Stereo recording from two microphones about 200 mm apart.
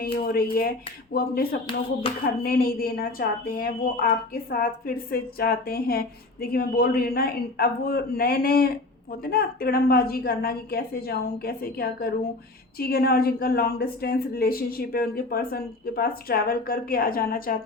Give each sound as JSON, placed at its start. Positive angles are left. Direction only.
{"t": 0.0, "sound": "a woman's voice", "side_deg": 50}
{"t": 2.0, "sound": "a sound", "side_deg": 30}
{"t": 2.4, "sound": "a woman's voice", "side_deg": 50}
{"t": 5.1, "sound": "a woman's voice", "side_deg": 50}